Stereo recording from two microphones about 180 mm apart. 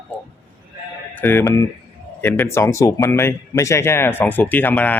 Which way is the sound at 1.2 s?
10° left (ahead or behind).